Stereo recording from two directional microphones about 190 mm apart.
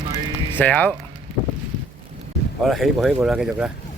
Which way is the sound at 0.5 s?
10° left (ahead or behind).